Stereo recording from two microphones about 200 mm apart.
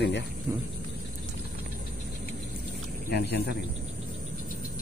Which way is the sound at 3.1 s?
55° left (ahead or behind).